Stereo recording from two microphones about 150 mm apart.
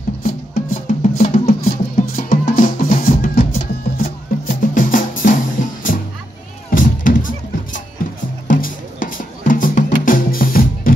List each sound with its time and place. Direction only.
0.2 s music: 65° left (ahead or behind)